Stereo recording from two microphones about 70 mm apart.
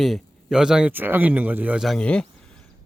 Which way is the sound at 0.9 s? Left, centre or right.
Right.